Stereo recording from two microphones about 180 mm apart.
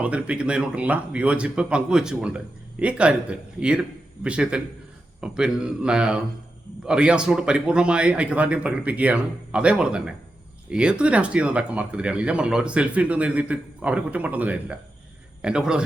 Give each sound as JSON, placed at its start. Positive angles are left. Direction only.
{"t": 0.0, "sound": "a man's voice", "side_deg": -5}